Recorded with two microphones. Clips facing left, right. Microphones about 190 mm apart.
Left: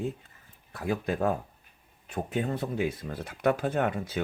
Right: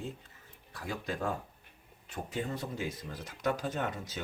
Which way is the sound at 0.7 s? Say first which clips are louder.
Left 8 dB; 60° left (ahead or behind).